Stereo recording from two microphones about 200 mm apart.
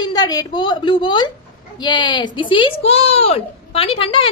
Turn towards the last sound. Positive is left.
turn(degrees=25)  # may be behind; listen again after turning